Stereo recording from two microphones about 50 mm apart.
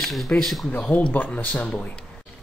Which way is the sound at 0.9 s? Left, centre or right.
Left.